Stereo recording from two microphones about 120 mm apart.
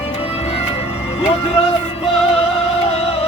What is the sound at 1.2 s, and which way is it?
Speech, 60° left (ahead or behind).